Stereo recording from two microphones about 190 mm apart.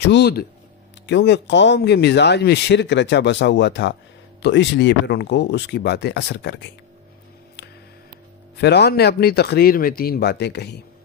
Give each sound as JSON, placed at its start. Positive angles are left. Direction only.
{"t": 0.0, "sound": "speech", "side_deg": 65}
{"t": 8.5, "sound": "speech", "side_deg": 60}